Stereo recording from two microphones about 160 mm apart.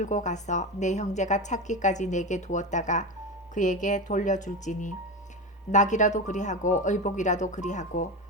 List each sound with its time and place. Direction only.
0.0 s a woman's voice: 50° left (ahead or behind)